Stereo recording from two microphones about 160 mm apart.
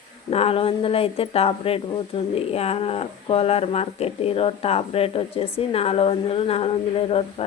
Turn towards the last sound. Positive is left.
turn(degrees=35)  # may be behind; listen again after turning